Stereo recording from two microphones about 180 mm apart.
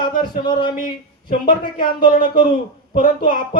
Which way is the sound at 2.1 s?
50° left (ahead or behind).